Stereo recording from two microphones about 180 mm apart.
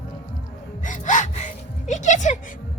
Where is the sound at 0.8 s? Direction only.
45° left (ahead or behind).